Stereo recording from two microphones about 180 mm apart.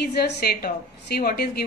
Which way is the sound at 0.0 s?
60° left (ahead or behind).